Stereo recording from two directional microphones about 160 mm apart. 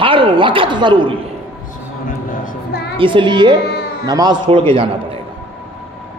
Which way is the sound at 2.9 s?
30° right (ahead or behind).